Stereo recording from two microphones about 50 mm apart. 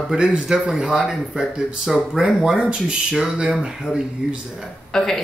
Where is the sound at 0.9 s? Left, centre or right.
Centre.